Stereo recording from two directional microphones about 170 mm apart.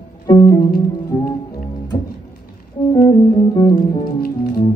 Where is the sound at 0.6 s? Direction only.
65° left (ahead or behind).